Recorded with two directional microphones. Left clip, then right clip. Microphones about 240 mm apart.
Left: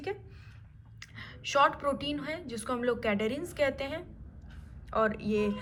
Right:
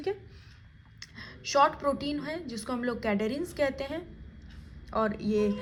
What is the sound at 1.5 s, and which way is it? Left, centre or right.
A woman's voice, centre.